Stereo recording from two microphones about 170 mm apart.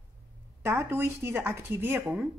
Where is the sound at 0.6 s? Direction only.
15° right (ahead or behind).